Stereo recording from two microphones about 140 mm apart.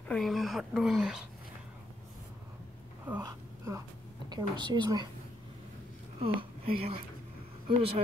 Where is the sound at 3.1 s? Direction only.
10° right (ahead or behind).